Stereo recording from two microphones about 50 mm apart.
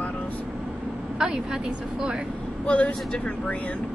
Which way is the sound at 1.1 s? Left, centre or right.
Centre.